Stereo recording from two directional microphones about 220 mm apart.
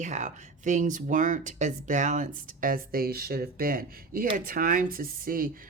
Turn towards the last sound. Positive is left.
turn(degrees=-40)  # may be behind; listen again after turning